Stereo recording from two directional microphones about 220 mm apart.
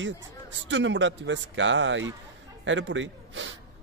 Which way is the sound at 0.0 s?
55° right (ahead or behind).